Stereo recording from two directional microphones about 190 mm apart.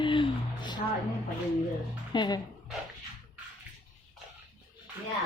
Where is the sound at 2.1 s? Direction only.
25° left (ahead or behind).